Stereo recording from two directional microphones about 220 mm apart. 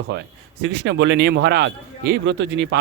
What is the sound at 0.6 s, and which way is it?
Speech, 50° right (ahead or behind).